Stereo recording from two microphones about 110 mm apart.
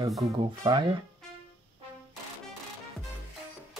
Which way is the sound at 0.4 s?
45° right (ahead or behind).